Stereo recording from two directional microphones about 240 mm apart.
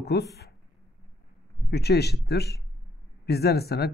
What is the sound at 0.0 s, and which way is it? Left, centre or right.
Speech, left.